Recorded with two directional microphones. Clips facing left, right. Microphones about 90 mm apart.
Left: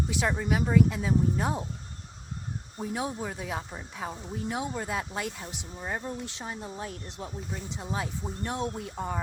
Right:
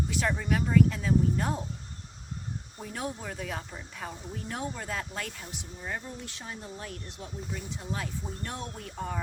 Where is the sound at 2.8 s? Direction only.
15° left (ahead or behind).